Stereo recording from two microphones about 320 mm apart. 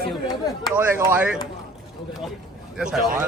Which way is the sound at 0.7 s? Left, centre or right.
Centre.